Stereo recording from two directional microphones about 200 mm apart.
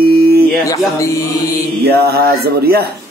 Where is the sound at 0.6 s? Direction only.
15° left (ahead or behind).